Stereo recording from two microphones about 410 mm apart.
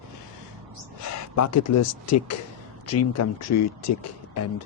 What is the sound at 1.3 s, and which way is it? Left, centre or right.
Speech, left.